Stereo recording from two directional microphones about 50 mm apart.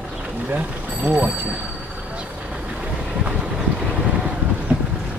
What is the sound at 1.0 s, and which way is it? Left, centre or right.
Speech, right.